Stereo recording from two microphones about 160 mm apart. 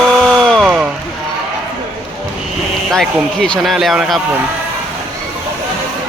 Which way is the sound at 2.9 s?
5° left (ahead or behind).